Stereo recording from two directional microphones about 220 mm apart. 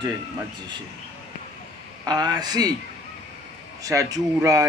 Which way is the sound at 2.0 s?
20° right (ahead or behind).